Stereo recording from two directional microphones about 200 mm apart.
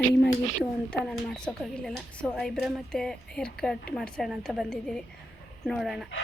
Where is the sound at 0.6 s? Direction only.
Centre (ahead or behind).